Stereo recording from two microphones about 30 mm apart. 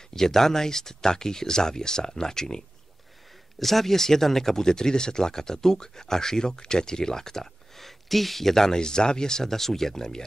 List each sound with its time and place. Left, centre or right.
0.1 s speech: centre
3.5 s speech: centre